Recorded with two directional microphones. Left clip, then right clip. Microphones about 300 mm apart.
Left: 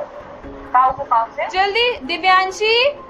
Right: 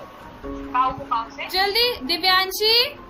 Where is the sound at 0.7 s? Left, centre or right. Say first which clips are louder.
Left 7 dB; centre.